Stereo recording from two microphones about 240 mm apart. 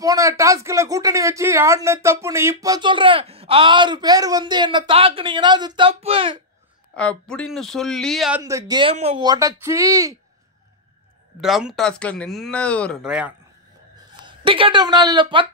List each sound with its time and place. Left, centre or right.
0.0 s speech: centre
7.0 s speech: centre
8.4 s speech: centre
11.4 s speech: centre
14.2 s a woman's voice: right